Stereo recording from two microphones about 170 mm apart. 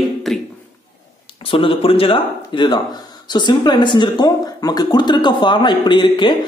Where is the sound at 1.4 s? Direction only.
30° left (ahead or behind).